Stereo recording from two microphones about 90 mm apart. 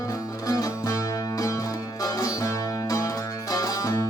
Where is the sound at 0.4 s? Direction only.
40° left (ahead or behind).